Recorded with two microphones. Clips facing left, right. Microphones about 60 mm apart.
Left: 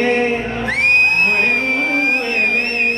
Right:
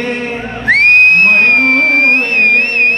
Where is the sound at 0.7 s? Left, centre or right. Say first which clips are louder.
Right 8 dB; right.